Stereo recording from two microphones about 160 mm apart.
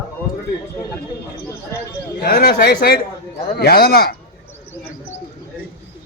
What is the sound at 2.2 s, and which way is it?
Speech, 75° left (ahead or behind).